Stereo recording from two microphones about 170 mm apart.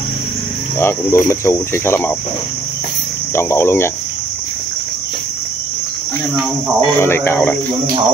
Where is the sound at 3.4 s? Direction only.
15° left (ahead or behind).